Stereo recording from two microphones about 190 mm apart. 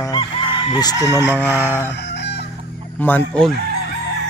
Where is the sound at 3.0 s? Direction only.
10° left (ahead or behind).